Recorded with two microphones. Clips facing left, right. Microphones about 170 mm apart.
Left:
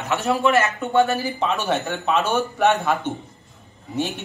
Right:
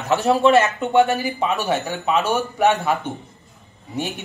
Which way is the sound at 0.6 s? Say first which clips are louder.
Right 2 dB; 15° right (ahead or behind).